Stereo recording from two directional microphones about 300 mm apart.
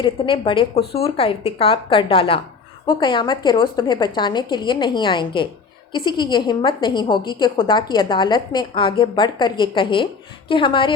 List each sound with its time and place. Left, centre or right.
0.0 s a woman's voice: centre